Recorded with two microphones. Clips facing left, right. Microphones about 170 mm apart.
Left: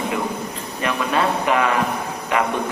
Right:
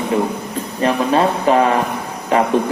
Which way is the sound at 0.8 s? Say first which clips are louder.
Right 6 dB; 30° right (ahead or behind).